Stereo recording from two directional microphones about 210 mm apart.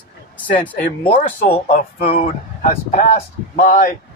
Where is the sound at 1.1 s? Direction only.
30° left (ahead or behind).